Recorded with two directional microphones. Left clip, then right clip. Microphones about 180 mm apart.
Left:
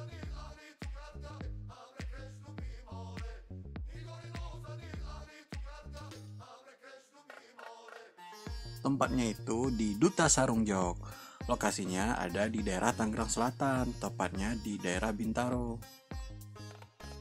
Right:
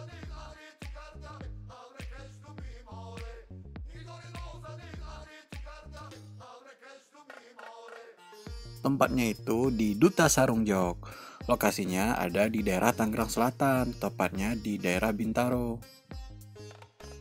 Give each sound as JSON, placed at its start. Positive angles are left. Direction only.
{"t": 5.5, "sound": "music", "side_deg": 0}
{"t": 7.2, "sound": "music", "side_deg": 0}
{"t": 8.8, "sound": "speech", "side_deg": -15}
{"t": 15.7, "sound": "music", "side_deg": 0}